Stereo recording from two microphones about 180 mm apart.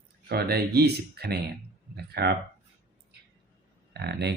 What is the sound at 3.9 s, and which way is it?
Speech, 65° right (ahead or behind).